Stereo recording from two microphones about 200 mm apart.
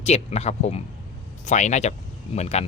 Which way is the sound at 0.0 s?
35° left (ahead or behind).